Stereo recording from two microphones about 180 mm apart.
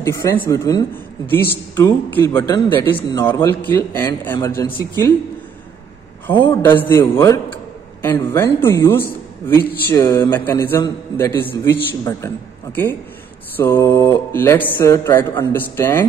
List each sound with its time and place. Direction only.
0.0 s a man's voice: 15° left (ahead or behind)
6.2 s a man's voice: 10° left (ahead or behind)
13.6 s a man's voice: 15° left (ahead or behind)